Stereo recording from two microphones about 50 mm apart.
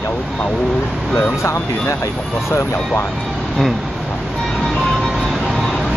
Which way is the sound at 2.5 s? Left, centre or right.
Left.